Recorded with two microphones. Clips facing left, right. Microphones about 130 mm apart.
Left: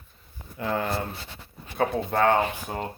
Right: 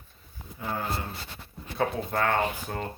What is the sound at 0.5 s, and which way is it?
Speech, 75° left (ahead or behind).